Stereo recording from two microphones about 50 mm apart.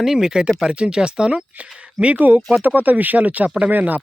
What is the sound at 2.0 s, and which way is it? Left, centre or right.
Speech, right.